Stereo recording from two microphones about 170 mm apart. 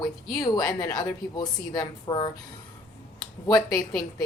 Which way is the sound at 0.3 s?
20° left (ahead or behind).